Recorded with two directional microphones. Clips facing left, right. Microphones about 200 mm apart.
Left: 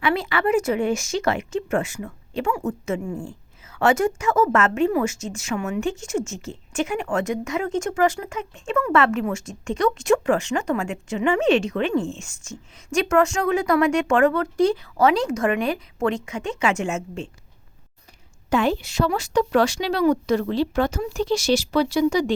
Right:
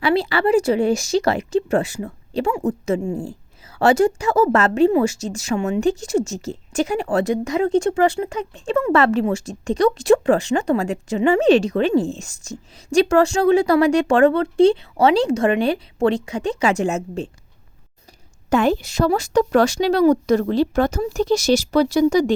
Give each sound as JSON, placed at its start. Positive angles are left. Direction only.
{"t": 0.0, "sound": "speech", "side_deg": -35}
{"t": 18.5, "sound": "speech", "side_deg": -45}